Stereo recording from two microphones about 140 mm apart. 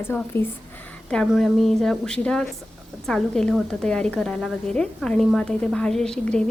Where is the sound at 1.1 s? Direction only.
5° left (ahead or behind).